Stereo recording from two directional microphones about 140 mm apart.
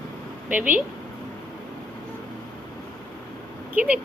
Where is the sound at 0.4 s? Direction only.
10° right (ahead or behind).